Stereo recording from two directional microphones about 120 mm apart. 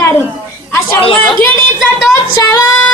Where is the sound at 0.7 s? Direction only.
25° left (ahead or behind).